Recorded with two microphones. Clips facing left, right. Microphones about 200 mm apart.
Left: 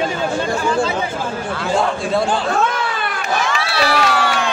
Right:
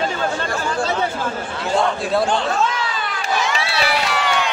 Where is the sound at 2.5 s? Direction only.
55° left (ahead or behind).